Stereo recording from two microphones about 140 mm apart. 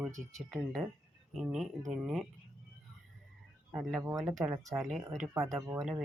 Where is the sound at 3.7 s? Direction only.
5° right (ahead or behind).